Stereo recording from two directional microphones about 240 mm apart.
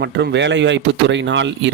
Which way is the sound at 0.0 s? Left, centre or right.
Right.